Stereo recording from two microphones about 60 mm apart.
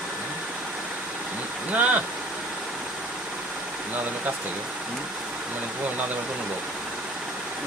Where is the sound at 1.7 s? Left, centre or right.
Right.